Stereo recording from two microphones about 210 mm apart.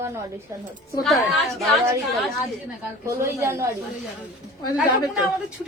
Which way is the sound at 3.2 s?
15° right (ahead or behind).